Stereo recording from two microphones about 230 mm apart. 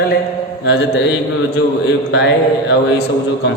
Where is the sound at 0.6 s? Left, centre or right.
Left.